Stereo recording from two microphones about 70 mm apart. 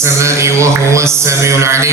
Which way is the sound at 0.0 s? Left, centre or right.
Right.